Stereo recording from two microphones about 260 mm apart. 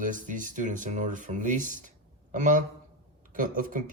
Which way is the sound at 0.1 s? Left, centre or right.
Right.